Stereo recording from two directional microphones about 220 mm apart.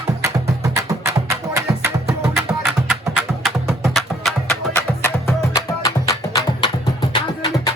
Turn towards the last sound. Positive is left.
turn(degrees=20)  # may be behind; listen again after turning